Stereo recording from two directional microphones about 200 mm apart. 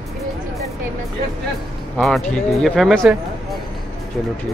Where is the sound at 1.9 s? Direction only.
5° left (ahead or behind).